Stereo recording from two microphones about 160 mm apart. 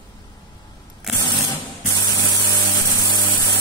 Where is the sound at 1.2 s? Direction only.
25° left (ahead or behind).